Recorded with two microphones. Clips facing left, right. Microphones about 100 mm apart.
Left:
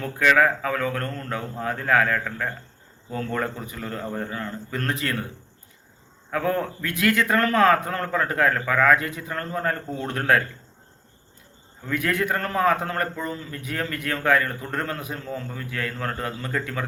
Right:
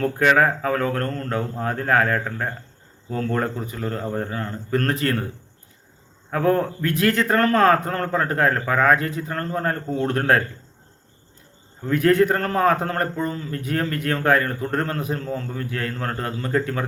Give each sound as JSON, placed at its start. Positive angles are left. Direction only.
{"t": 0.0, "sound": "a man's voice", "side_deg": -35}
{"t": 6.3, "sound": "a man's voice", "side_deg": -35}
{"t": 11.8, "sound": "a man's voice", "side_deg": -35}